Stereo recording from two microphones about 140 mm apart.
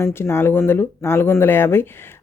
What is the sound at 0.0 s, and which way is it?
Speech, 15° left (ahead or behind).